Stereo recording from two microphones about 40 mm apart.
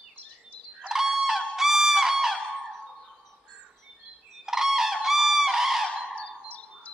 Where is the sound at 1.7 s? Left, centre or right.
Centre.